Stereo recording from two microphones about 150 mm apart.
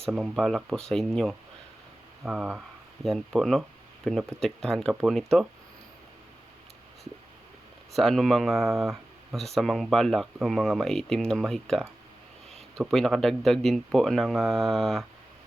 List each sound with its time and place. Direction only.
0.0 s speech: centre (ahead or behind)
7.9 s speech: centre (ahead or behind)